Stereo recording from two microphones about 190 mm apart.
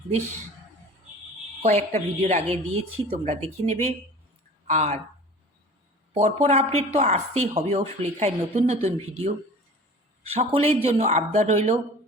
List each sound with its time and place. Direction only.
1.6 s speech: 35° right (ahead or behind)
6.1 s speech: 35° right (ahead or behind)